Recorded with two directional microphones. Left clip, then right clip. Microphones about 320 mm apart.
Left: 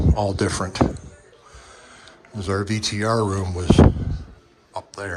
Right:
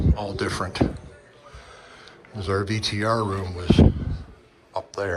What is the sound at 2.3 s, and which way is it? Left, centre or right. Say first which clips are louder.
Speech: left 1 dB; centre.